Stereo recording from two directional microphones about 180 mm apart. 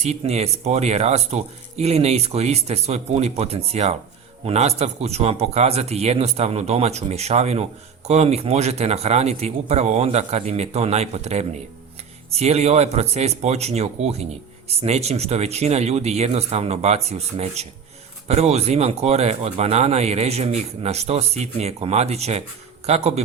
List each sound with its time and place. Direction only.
0.0 s speech: 35° right (ahead or behind)